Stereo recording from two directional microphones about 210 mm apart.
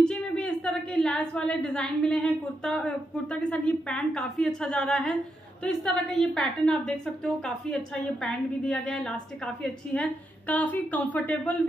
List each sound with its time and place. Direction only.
0.0 s a woman's voice: 5° left (ahead or behind)